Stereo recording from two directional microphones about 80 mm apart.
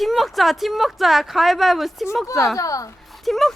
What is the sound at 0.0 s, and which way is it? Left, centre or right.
Speech, centre.